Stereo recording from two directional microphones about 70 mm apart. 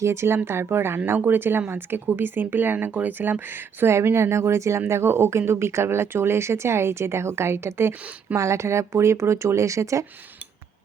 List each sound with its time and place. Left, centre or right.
0.0 s speech: right